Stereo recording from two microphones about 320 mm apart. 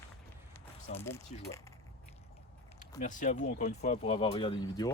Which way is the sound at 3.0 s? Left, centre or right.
Left.